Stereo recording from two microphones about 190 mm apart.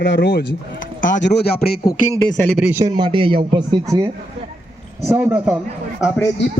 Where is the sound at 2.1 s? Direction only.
15° left (ahead or behind).